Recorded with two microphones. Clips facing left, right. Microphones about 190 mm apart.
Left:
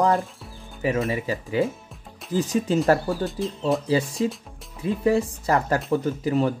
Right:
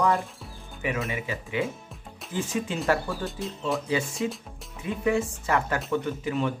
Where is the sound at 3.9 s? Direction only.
35° left (ahead or behind).